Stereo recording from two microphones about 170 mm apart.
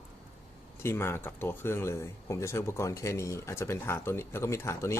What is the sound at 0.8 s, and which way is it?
Speech, 15° left (ahead or behind).